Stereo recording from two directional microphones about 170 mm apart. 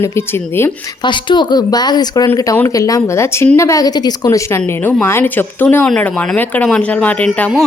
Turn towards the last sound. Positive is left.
turn(degrees=10)  # may be behind; listen again after turning